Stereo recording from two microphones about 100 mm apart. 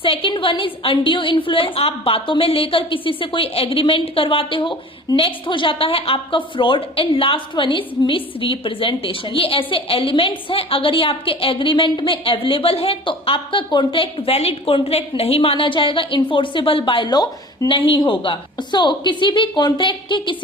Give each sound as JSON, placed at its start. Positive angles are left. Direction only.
{"t": 0.0, "sound": "a woman's voice", "side_deg": 60}